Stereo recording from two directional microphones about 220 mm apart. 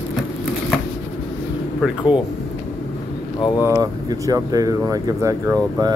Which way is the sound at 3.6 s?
15° right (ahead or behind).